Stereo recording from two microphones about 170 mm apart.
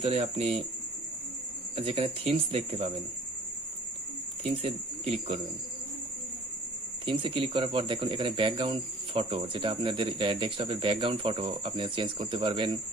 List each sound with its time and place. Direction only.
0.0 s speech: 35° right (ahead or behind)
1.7 s speech: 35° right (ahead or behind)
4.4 s speech: 35° right (ahead or behind)
7.0 s speech: 30° right (ahead or behind)